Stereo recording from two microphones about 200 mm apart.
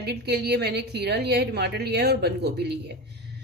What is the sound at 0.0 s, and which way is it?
A woman's voice, 55° right (ahead or behind).